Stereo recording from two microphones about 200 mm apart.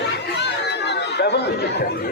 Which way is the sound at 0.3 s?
55° left (ahead or behind).